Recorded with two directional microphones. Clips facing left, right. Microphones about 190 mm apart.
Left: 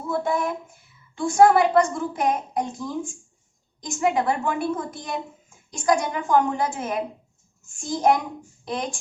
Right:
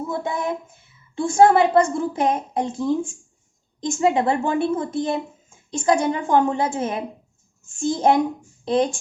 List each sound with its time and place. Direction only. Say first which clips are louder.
0.1 s speech: left 4 dB; 20° right (ahead or behind)